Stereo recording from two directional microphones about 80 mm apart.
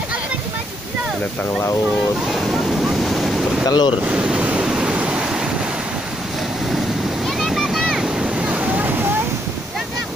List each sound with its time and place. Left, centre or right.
2.9 s waves: centre
3.6 s speech: left
4.1 s waves: centre
7.2 s waves: centre